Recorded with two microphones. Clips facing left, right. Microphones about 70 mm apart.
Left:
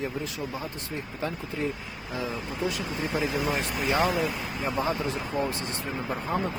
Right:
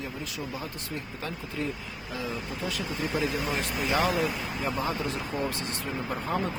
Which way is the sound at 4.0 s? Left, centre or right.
Centre.